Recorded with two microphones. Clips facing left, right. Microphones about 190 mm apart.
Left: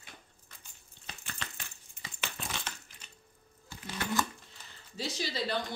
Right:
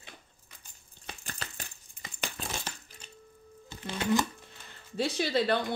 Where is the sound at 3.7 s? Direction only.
20° right (ahead or behind).